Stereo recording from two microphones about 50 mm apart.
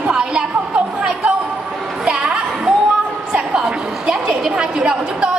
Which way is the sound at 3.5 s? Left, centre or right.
Centre.